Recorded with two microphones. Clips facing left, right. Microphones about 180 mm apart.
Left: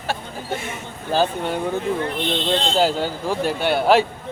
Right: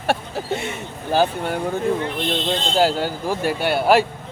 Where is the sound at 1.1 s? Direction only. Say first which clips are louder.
Right 1 dB; 15° right (ahead or behind).